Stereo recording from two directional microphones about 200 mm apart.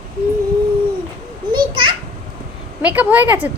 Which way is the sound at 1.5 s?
25° right (ahead or behind).